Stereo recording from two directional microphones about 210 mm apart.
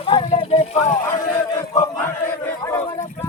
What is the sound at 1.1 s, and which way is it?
Battle cry, 15° left (ahead or behind).